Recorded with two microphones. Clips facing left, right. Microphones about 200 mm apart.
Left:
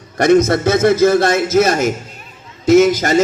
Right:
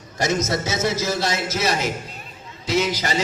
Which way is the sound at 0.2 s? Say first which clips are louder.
Left 11 dB; 60° left (ahead or behind).